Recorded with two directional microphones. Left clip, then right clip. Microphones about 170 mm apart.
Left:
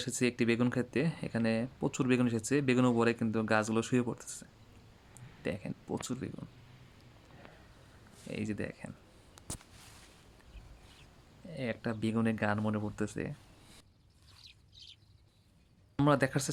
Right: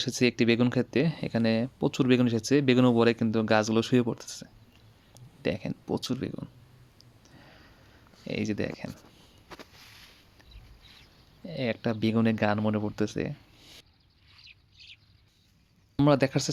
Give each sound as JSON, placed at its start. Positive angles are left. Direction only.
{"t": 0.0, "sound": "speech", "side_deg": -35}
{"t": 8.3, "sound": "speech", "side_deg": -40}
{"t": 11.4, "sound": "speech", "side_deg": -40}
{"t": 14.4, "sound": "bird", "side_deg": 90}
{"t": 16.0, "sound": "speech", "side_deg": -25}